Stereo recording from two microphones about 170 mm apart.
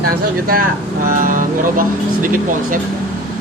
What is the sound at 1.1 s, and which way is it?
Speech, 55° right (ahead or behind).